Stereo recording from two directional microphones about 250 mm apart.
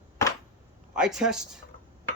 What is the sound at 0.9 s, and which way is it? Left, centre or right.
Speech, centre.